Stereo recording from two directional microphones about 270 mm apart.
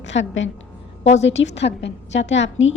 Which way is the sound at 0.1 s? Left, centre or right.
Left.